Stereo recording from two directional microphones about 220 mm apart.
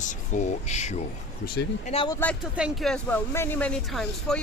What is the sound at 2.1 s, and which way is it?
Speech, 10° left (ahead or behind).